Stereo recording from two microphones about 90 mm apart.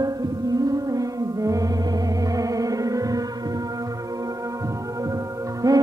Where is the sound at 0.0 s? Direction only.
45° right (ahead or behind).